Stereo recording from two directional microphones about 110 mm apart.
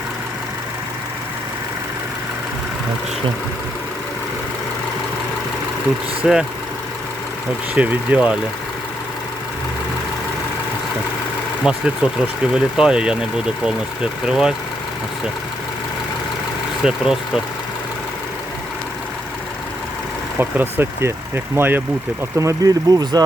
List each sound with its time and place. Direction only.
6.2 s speech: 5° right (ahead or behind)
7.8 s speech: 15° right (ahead or behind)
11.6 s speech: 5° right (ahead or behind)
16.8 s speech: 5° right (ahead or behind)
20.4 s speech: 20° right (ahead or behind)
22.4 s speech: 30° right (ahead or behind)